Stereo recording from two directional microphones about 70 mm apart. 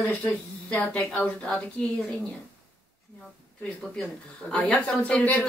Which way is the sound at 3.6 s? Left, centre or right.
Centre.